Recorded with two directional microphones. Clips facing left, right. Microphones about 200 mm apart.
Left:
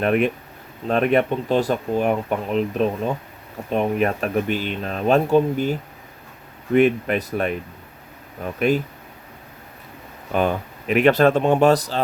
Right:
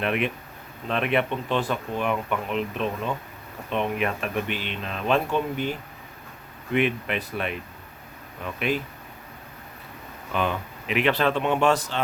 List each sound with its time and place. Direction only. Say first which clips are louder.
0.0 s speech: left 7 dB; 45° left (ahead or behind)
6.7 s speech: left 7 dB; 45° left (ahead or behind)
10.3 s speech: left 6 dB; 45° left (ahead or behind)